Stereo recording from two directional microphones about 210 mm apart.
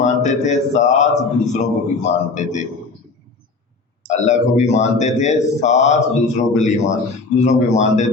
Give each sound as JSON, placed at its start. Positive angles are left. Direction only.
{"t": 0.0, "sound": "a man's voice", "side_deg": 35}
{"t": 4.1, "sound": "a man's voice", "side_deg": 35}